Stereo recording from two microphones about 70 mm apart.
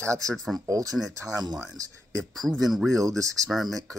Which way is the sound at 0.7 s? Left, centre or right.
Right.